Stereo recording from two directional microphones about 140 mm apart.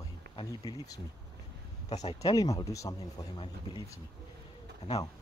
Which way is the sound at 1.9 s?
50° left (ahead or behind).